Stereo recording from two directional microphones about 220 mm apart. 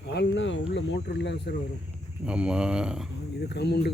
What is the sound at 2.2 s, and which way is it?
Speech, 5° right (ahead or behind).